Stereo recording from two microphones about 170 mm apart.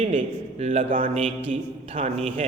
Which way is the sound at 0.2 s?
40° right (ahead or behind).